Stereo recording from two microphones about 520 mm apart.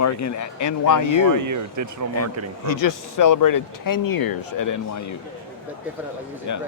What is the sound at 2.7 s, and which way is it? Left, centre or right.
Speech, left.